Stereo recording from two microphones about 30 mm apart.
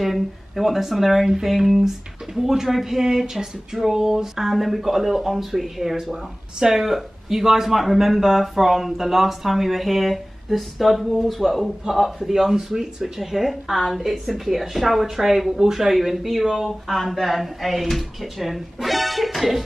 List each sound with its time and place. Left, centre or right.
0.0 s speech: centre
4.5 s speech: centre
12.3 s speech: centre